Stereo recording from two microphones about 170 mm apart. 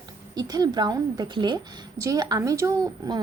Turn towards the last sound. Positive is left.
turn(degrees=-20)  # may be behind; listen again after turning